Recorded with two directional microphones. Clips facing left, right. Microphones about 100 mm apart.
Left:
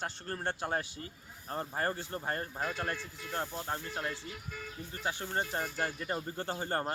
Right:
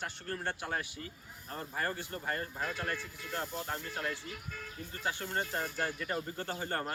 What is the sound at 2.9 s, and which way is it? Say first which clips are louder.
Speech: even; 5° left (ahead or behind).